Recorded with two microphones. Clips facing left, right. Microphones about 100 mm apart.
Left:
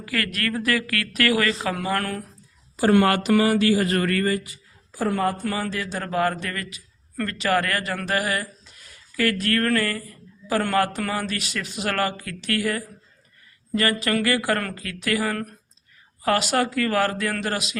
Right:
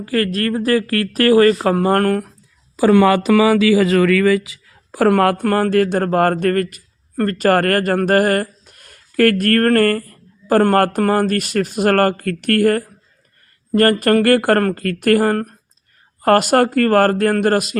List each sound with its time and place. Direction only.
0.0 s a woman's voice: 35° right (ahead or behind)
1.6 s speech: 50° right (ahead or behind)
3.8 s speech: 90° right; by 17.7 s 50° right (ahead or behind)